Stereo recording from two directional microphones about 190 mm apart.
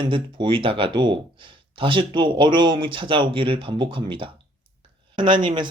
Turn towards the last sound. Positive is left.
turn(degrees=-25)  # may be behind; listen again after turning